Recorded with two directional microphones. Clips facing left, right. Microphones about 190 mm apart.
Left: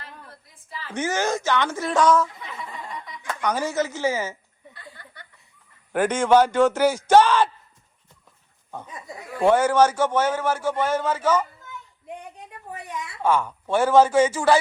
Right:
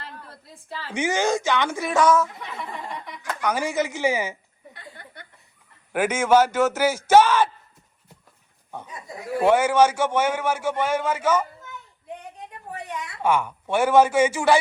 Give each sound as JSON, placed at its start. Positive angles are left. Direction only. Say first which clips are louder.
{"t": 0.4, "sound": "a woman's voice", "louder": "right 4 dB", "side_deg": -70}
{"t": 0.9, "sound": "a man's voice", "louder": "right 2 dB", "side_deg": -15}
{"t": 3.4, "sound": "a man's voice", "louder": "even", "side_deg": -10}
{"t": 5.9, "sound": "a man's voice", "louder": "left 1 dB", "side_deg": -5}
{"t": 9.4, "sound": "a man's voice", "louder": "even", "side_deg": -10}
{"t": 13.2, "sound": "a man's voice", "louder": "even", "side_deg": -10}